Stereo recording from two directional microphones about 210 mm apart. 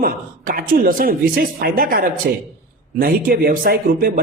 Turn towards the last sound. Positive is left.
turn(degrees=-45)  # may be behind; listen again after turning